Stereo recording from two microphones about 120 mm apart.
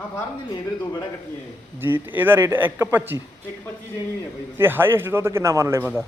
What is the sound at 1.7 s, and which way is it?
A man's voice, 20° right (ahead or behind).